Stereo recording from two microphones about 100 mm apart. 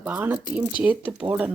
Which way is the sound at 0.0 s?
15° right (ahead or behind).